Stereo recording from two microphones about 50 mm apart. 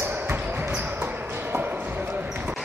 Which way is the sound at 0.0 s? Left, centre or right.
Right.